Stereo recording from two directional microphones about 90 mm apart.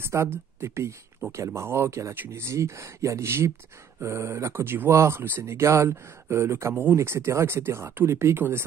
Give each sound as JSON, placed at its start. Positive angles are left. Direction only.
{"t": 0.0, "sound": "speech", "side_deg": -30}
{"t": 6.7, "sound": "speech", "side_deg": -20}